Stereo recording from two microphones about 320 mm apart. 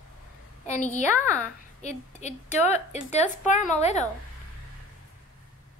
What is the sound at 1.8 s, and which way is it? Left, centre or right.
A woman's voice, left.